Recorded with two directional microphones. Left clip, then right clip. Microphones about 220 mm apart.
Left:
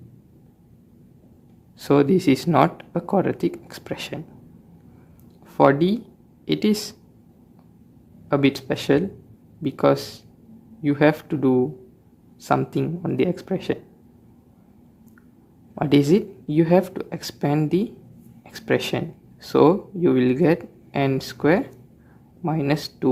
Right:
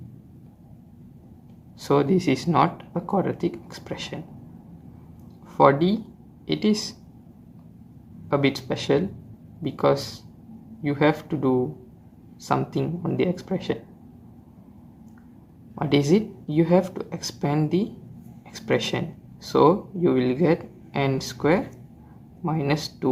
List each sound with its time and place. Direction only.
1.8 s speech: 30° left (ahead or behind)
5.5 s speech: 35° left (ahead or behind)
8.3 s speech: 35° left (ahead or behind)
15.7 s speech: 30° left (ahead or behind)